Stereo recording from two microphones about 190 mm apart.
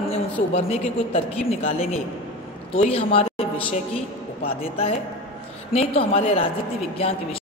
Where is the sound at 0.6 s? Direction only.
30° left (ahead or behind).